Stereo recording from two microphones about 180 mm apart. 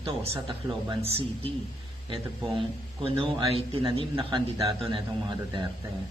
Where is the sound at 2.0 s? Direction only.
30° right (ahead or behind).